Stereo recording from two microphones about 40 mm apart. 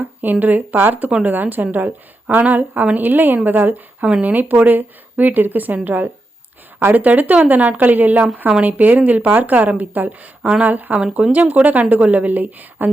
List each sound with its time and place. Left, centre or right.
0.0 s speech: right